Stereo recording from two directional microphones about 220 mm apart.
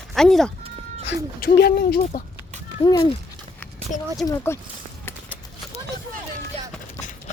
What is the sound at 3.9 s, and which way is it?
Speech, 35° left (ahead or behind).